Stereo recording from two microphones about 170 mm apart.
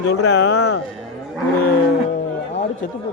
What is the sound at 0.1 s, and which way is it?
Speech, 90° left.